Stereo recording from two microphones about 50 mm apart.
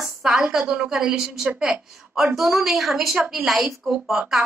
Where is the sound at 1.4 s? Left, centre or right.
Centre.